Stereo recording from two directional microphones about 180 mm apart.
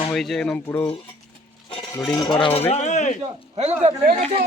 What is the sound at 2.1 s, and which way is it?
Cutlery, 25° left (ahead or behind).